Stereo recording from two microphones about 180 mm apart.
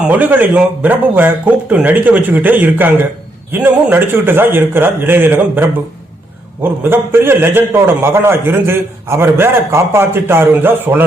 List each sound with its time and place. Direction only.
0.1 s speech: 10° right (ahead or behind)